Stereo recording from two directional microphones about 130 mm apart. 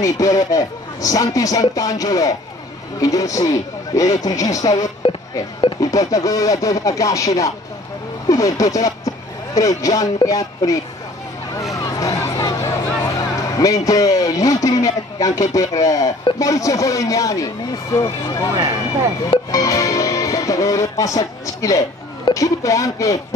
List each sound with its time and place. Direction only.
0.0 s a man's voice: 25° left (ahead or behind)
11.7 s a sound: 25° left (ahead or behind)
16.3 s a man's voice: 25° left (ahead or behind)
19.5 s speech: 25° left (ahead or behind)